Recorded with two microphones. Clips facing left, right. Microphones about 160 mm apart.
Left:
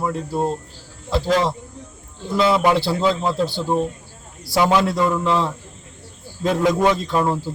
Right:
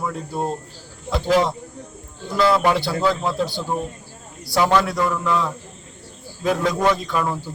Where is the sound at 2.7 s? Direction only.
25° left (ahead or behind).